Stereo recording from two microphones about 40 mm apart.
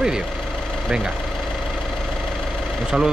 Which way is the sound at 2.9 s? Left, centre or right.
Centre.